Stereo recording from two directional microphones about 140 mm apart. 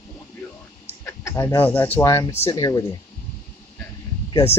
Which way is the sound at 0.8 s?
20° left (ahead or behind).